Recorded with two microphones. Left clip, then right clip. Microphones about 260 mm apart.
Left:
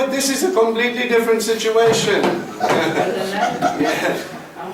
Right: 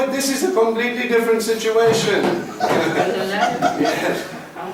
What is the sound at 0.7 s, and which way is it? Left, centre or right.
A man's voice, centre.